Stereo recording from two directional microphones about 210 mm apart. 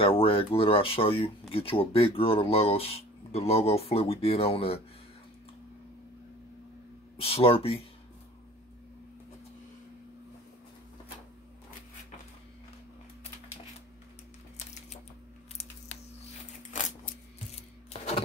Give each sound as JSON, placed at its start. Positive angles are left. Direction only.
{"t": 0.0, "sound": "speech", "side_deg": 25}
{"t": 7.2, "sound": "speech", "side_deg": 25}